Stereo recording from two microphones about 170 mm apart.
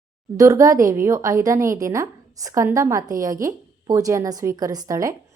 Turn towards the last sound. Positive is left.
turn(degrees=-20)  # may be behind; listen again after turning